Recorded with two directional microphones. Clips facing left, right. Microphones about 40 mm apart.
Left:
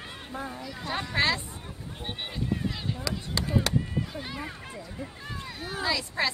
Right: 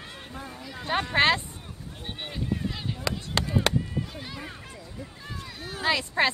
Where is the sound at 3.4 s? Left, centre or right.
Right.